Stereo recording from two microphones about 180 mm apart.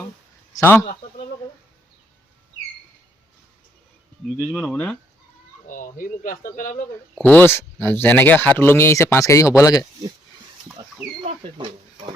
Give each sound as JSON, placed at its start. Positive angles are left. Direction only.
{"t": 0.5, "sound": "speech", "side_deg": 15}
{"t": 4.6, "sound": "speech", "side_deg": 5}
{"t": 5.6, "sound": "speech", "side_deg": 50}
{"t": 7.2, "sound": "speech", "side_deg": 10}
{"t": 11.3, "sound": "speech", "side_deg": -30}